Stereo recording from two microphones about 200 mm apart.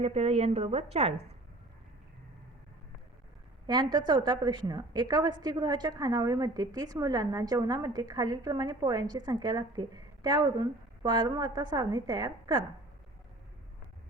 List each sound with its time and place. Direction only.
0.0 s a woman's voice: 30° right (ahead or behind)
3.7 s a woman's voice: 20° right (ahead or behind)